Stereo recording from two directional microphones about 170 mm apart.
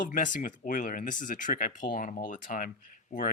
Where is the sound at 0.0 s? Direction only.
50° left (ahead or behind).